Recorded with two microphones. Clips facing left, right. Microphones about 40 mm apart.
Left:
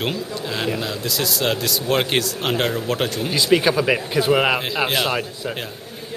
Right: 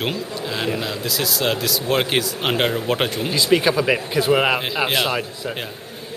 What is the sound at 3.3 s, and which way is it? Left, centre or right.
A man's voice, centre.